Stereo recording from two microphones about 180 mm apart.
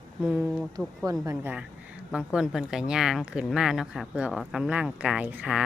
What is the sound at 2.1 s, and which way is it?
Speech, 5° right (ahead or behind).